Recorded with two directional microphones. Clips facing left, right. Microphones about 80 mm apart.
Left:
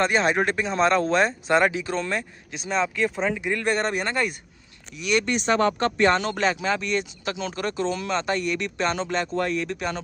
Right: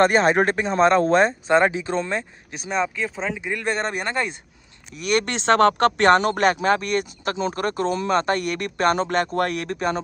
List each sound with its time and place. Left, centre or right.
0.0 s speech: right
2.7 s speech: centre
3.6 s speech: right
4.9 s speech: right
5.3 s speech: right
6.2 s speech: right
7.3 s speech: right
9.7 s speech: right